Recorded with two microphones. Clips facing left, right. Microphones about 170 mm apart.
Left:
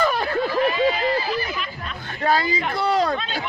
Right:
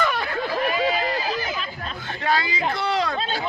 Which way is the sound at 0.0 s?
40° left (ahead or behind).